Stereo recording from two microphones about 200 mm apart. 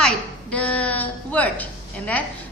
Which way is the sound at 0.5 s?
5° left (ahead or behind).